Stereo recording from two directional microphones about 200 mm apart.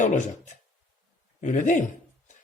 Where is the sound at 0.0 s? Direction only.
40° left (ahead or behind).